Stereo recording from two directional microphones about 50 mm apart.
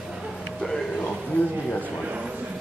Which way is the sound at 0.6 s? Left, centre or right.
Centre.